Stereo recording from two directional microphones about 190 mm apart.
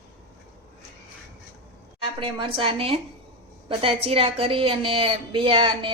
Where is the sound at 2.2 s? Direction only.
25° right (ahead or behind).